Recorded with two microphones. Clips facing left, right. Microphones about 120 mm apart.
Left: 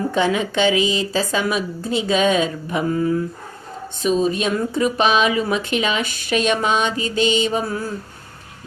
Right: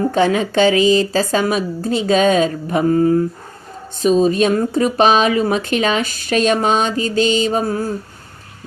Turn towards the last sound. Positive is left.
turn(degrees=-40)  # may be behind; listen again after turning